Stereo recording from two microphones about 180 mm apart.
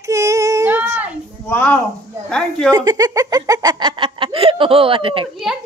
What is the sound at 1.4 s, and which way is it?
A woman's voice, 10° left (ahead or behind).